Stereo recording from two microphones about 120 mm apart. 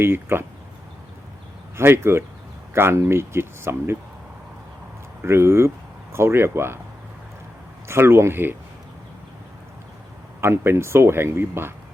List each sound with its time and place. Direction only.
0.0 s speech: 20° right (ahead or behind)
1.7 s speech: 20° right (ahead or behind)
5.2 s speech: 20° right (ahead or behind)
7.9 s speech: 20° right (ahead or behind)
10.4 s speech: 20° right (ahead or behind)